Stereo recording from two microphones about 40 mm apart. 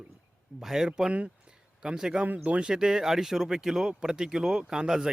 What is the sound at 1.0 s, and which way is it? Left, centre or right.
Speech, right.